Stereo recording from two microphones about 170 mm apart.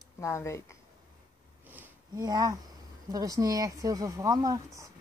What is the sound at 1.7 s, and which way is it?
Sniff, 10° right (ahead or behind).